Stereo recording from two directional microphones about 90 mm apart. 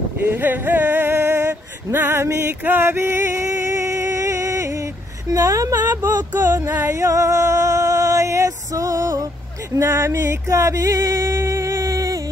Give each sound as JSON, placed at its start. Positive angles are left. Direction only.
{"t": 0.2, "sound": "male singing", "side_deg": -20}
{"t": 5.3, "sound": "speech", "side_deg": -40}
{"t": 6.3, "sound": "a sound", "side_deg": -25}
{"t": 9.8, "sound": "music", "side_deg": -30}